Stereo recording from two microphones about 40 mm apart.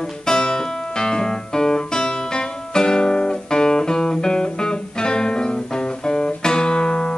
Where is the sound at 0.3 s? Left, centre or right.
Centre.